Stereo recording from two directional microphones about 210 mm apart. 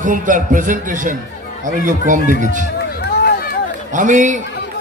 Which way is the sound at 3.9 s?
35° right (ahead or behind).